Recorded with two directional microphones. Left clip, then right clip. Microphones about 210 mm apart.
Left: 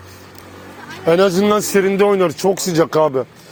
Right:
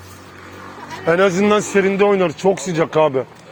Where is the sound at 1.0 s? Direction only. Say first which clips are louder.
Left 1 dB; 45° left (ahead or behind).